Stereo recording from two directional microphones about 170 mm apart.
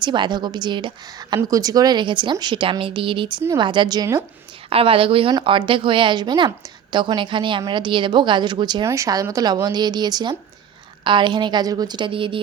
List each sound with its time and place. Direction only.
0.0 s a woman's voice: 25° right (ahead or behind)
4.7 s a woman's voice: 35° right (ahead or behind)